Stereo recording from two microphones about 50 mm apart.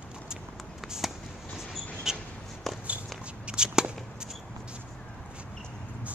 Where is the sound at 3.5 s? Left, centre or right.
Centre.